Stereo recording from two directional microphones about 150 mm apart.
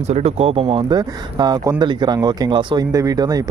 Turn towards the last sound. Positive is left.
turn(degrees=-25)  # may be behind; listen again after turning